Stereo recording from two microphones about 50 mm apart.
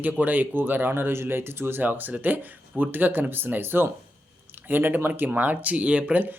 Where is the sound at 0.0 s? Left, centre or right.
Right.